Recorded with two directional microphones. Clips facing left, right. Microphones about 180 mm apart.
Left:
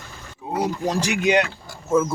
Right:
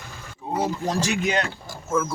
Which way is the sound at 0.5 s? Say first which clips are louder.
Left 1 dB; 15° left (ahead or behind).